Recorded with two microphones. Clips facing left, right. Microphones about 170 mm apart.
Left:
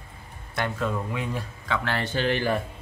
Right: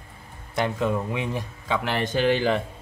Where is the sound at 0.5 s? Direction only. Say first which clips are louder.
Right 4 dB; 20° right (ahead or behind).